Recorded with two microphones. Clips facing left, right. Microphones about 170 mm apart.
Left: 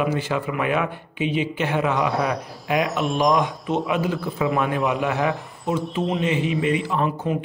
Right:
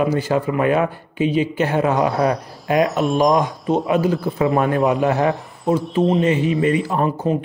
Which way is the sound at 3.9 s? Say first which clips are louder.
Right 5 dB; 45° right (ahead or behind).